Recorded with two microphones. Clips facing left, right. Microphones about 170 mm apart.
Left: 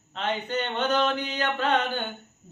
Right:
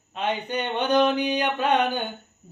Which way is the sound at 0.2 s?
15° right (ahead or behind).